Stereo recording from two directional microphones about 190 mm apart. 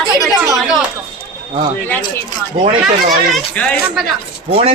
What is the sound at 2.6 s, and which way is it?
Speech, 30° right (ahead or behind).